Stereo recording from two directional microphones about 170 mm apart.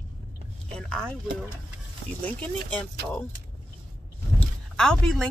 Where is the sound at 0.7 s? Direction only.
5° left (ahead or behind).